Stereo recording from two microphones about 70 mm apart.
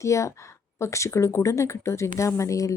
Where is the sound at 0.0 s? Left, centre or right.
Left.